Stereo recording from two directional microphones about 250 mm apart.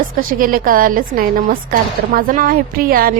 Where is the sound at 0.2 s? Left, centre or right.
Right.